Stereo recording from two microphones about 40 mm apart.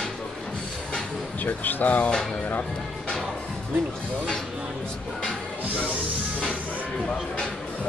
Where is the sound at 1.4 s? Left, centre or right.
Left.